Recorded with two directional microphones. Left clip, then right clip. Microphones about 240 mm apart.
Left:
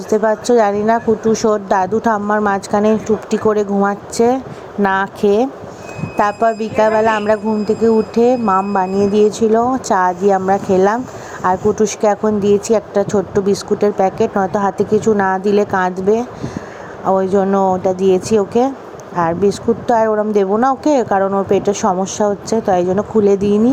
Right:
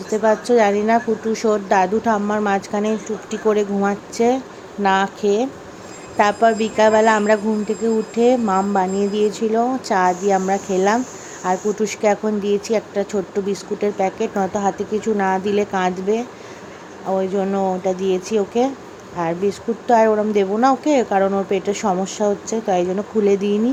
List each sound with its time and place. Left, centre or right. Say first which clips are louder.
0.1 s a woman's voice: left 3 dB; centre